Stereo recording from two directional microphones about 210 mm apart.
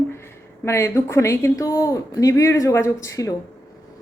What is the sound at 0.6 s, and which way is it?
A woman's voice, 15° left (ahead or behind).